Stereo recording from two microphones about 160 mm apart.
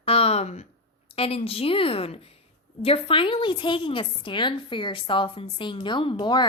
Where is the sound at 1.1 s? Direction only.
35° left (ahead or behind).